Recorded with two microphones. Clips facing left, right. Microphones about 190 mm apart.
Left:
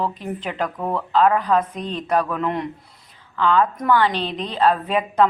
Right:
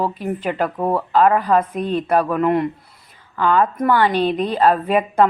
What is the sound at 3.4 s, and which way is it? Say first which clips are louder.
Speech: right 2 dB; 45° right (ahead or behind).